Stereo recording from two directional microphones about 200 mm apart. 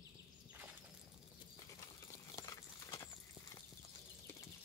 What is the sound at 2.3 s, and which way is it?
Horse, 15° left (ahead or behind).